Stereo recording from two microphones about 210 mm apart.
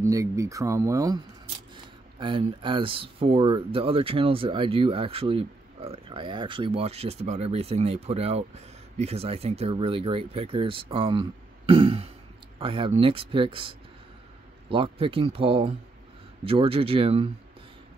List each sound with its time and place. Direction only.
0.0 s speech: 15° right (ahead or behind)